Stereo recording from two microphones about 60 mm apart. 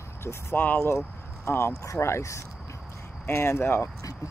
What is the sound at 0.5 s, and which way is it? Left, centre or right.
Speech, left.